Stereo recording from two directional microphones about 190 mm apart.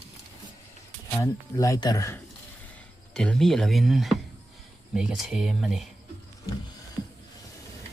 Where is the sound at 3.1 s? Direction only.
5° left (ahead or behind).